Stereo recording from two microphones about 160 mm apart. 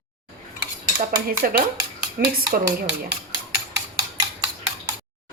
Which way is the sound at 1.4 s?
60° right (ahead or behind).